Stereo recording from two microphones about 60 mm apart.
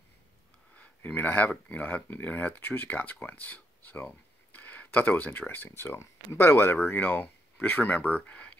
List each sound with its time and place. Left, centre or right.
0.7 s speech: left
5.8 s speech: left